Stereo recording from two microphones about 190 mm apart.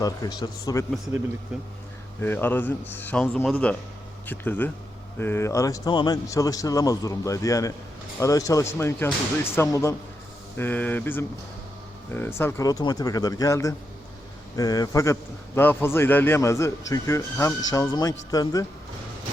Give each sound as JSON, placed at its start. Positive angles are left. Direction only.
{"t": 0.0, "sound": "speech", "side_deg": 20}
{"t": 2.2, "sound": "a man's voice", "side_deg": 10}